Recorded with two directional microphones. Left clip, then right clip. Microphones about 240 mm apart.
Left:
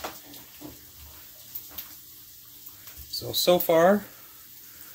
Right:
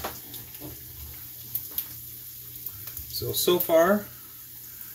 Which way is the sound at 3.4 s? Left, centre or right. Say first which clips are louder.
Left 1 dB; left.